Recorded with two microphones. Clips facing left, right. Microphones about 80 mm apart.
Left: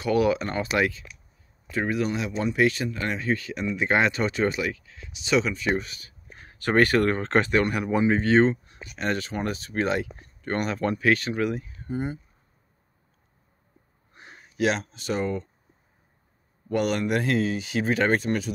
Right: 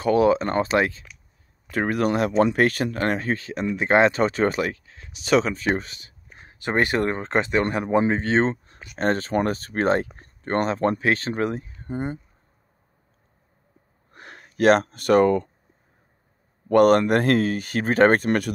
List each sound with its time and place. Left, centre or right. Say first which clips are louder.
0.0 s speech: right 4 dB; right
1.7 s speech: right 4 dB; right
7.6 s speech: right 2 dB; right
14.1 s speech: right 3 dB; right
16.6 s speech: right 9 dB; right